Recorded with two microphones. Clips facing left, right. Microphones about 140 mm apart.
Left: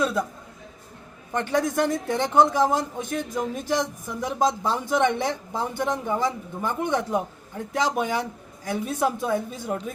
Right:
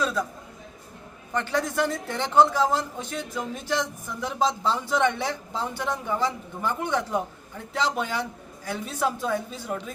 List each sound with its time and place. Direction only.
0.0 s a man's voice: 20° left (ahead or behind)
1.3 s a man's voice: 20° left (ahead or behind)